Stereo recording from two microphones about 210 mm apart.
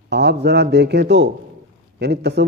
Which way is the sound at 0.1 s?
50° right (ahead or behind).